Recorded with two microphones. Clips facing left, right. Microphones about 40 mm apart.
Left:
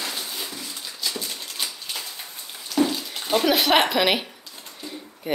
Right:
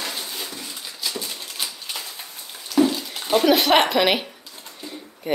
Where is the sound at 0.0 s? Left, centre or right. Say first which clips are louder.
Right 1 dB; centre.